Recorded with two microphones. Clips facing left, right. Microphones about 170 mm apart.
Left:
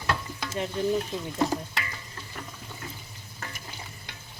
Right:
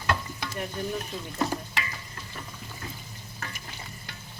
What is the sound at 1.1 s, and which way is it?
Speech, 20° left (ahead or behind).